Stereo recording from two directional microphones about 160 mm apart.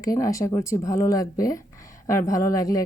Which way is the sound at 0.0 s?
20° left (ahead or behind).